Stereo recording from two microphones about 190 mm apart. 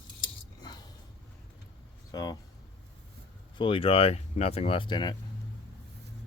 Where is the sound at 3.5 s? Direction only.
25° left (ahead or behind).